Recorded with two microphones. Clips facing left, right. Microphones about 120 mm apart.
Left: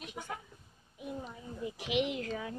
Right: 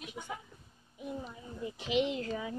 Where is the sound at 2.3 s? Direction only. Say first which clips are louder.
Right 1 dB; 5° right (ahead or behind).